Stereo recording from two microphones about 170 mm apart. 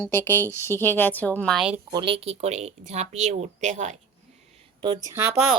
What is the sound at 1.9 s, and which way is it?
Speech, 30° right (ahead or behind).